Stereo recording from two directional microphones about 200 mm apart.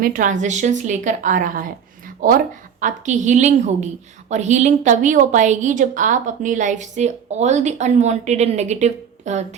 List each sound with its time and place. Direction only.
0.0 s a woman's voice: 45° right (ahead or behind)